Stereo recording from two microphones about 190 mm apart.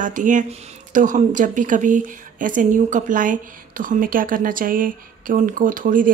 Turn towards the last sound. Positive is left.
turn(degrees=-45)  # may be behind; listen again after turning